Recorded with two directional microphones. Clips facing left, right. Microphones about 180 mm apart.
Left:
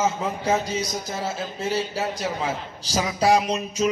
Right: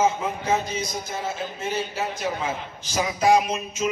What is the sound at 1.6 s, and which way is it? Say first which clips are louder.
A man's voice: left 3 dB; 35° left (ahead or behind).